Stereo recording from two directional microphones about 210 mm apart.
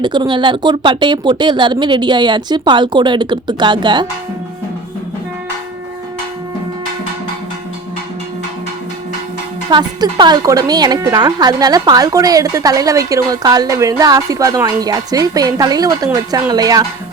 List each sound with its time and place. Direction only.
0.0 s speech: 20° right (ahead or behind)
9.6 s speech: 20° right (ahead or behind)